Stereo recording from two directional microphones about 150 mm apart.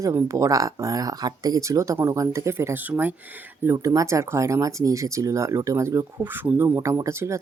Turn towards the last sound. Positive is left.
turn(degrees=-20)  # may be behind; listen again after turning